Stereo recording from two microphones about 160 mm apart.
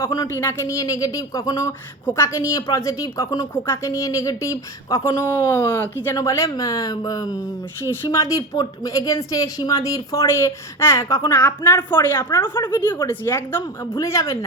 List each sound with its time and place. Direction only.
0.0 s a man's voice: 20° left (ahead or behind)
12.7 s speech: 15° left (ahead or behind)